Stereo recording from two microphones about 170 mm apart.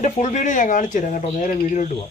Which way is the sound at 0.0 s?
45° left (ahead or behind).